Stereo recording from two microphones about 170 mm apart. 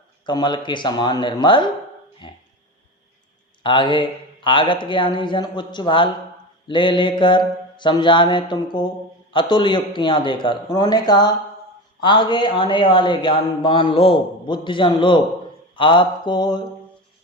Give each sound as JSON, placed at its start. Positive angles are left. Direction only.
{"t": 0.3, "sound": "a man's voice", "side_deg": 25}
{"t": 3.6, "sound": "a man's voice", "side_deg": 30}